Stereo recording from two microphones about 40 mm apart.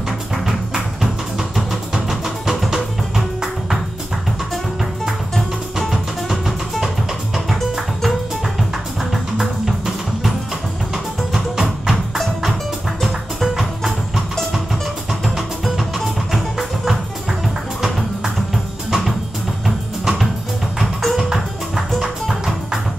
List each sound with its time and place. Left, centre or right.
0.5 s music: centre
5.8 s music: centre
9.1 s music: centre
11.3 s music: centre
13.0 s music: centre
15.3 s music: centre
22.0 s music: centre